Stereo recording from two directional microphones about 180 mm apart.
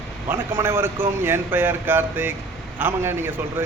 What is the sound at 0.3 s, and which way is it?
A man's voice, 15° right (ahead or behind).